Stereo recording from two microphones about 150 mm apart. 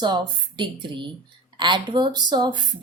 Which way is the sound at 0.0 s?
30° right (ahead or behind).